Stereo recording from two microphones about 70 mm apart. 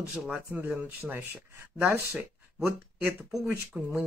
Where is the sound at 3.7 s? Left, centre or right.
Centre.